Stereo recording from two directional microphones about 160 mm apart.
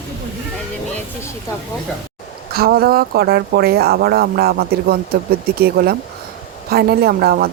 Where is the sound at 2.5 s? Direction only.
70° right (ahead or behind).